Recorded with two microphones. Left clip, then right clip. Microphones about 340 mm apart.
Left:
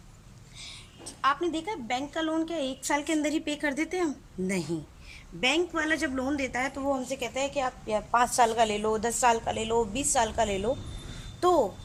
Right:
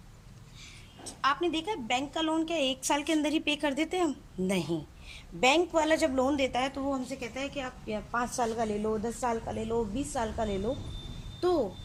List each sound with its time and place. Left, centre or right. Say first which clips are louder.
1.0 s a woman's voice: left 2 dB; centre